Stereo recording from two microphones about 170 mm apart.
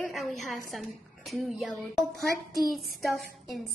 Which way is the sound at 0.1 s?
Centre (ahead or behind).